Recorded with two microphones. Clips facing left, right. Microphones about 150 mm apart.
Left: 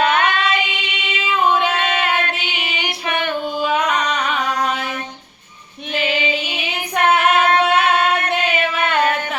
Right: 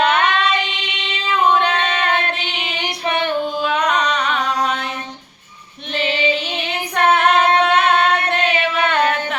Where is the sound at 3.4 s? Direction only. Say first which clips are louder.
Even; 5° left (ahead or behind).